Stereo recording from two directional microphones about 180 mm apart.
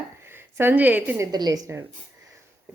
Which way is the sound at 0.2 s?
15° right (ahead or behind).